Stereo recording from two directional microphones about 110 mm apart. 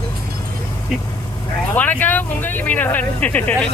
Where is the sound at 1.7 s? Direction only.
15° left (ahead or behind).